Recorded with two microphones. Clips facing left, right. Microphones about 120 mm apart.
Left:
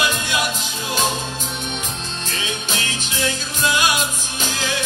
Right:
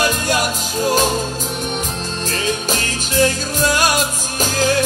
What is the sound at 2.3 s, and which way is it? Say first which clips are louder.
Music: right 7 dB; 45° right (ahead or behind).